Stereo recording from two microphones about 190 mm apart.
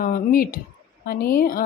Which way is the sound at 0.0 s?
45° left (ahead or behind).